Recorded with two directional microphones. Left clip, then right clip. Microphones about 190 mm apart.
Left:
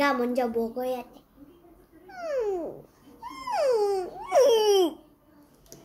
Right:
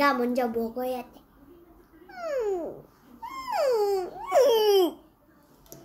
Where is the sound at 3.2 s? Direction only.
Centre (ahead or behind).